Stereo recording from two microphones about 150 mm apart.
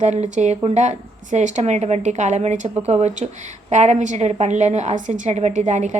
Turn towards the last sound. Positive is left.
turn(degrees=-50)  # may be behind; listen again after turning